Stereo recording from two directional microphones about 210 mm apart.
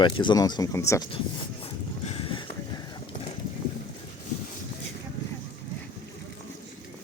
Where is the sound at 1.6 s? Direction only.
25° left (ahead or behind).